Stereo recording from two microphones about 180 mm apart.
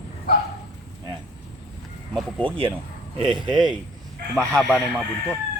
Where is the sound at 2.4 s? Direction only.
30° right (ahead or behind).